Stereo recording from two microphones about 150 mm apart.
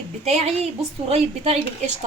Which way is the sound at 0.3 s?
45° right (ahead or behind).